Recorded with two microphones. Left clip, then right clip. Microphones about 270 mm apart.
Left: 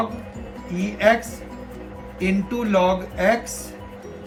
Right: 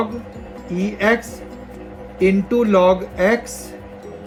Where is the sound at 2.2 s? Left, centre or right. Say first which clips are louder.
Right 8 dB; centre.